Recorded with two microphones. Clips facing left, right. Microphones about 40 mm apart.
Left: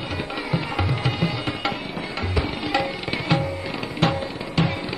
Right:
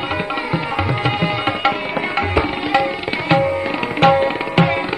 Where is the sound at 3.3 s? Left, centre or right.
Right.